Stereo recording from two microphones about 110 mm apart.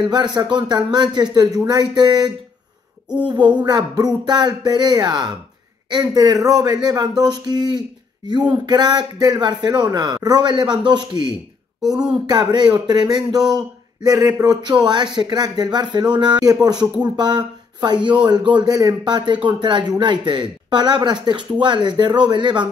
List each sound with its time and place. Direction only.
0.1 s a man's voice: 40° right (ahead or behind)